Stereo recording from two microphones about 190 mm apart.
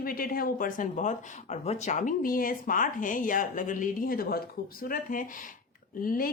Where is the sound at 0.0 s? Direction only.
50° left (ahead or behind).